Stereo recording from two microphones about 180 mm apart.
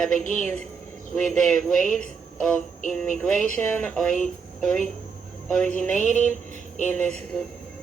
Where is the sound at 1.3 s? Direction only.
5° left (ahead or behind).